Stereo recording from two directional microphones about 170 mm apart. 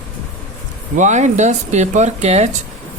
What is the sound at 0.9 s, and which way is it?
Speech, 45° right (ahead or behind).